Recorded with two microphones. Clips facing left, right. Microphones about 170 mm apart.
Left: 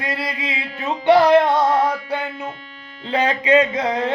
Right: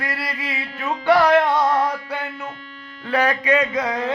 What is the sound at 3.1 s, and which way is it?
Music, 20° left (ahead or behind).